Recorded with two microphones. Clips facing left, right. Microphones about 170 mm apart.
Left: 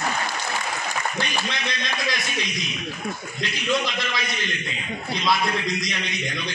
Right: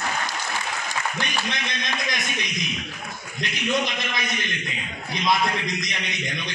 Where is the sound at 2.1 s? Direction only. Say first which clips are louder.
Left 1 dB; 20° right (ahead or behind).